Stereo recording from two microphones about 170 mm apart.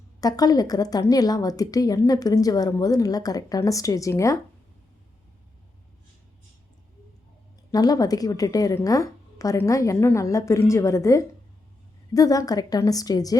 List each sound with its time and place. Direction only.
0.2 s a woman's voice: 20° left (ahead or behind)
7.7 s a woman's voice: 20° left (ahead or behind)